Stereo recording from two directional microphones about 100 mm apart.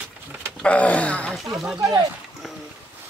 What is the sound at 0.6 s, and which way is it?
Wail, 15° left (ahead or behind).